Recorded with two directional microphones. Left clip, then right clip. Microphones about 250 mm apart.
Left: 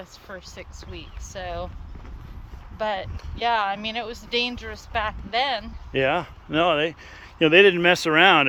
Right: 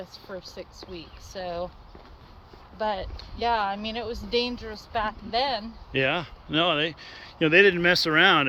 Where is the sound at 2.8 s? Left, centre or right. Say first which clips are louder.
Left 2 dB; centre.